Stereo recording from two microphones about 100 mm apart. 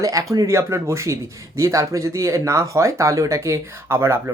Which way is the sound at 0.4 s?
25° right (ahead or behind).